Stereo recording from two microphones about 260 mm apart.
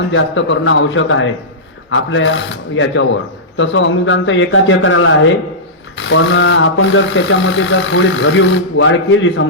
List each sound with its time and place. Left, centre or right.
0.1 s speech: left